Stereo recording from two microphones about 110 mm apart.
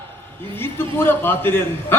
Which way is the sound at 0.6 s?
20° left (ahead or behind).